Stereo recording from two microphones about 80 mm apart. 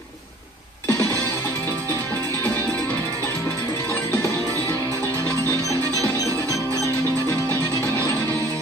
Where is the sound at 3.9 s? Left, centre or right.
Left.